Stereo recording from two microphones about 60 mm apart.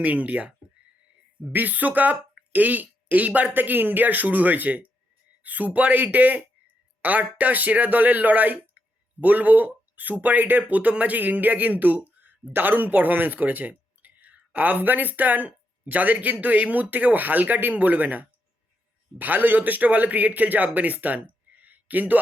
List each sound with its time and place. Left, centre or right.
0.0 s speech: right
1.5 s a man's voice: right